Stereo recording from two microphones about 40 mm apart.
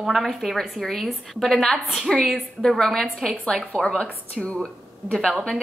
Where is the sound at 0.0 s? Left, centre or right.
Centre.